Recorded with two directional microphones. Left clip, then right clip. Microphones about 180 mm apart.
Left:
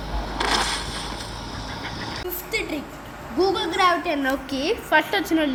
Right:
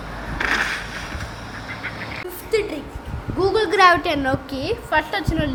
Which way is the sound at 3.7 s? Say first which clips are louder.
Right 8 dB; 50° right (ahead or behind).